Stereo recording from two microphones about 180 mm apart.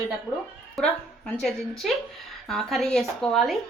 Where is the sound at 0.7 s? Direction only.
Centre (ahead or behind).